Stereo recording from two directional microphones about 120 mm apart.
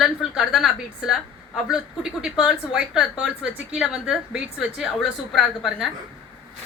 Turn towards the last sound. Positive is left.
turn(degrees=0)  # may be behind; listen again after turning